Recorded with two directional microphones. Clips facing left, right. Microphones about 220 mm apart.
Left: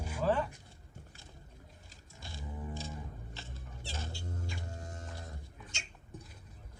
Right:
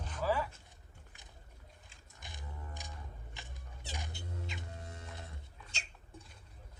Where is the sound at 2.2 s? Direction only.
20° right (ahead or behind).